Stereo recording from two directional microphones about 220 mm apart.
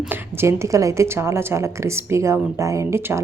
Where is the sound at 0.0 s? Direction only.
10° right (ahead or behind).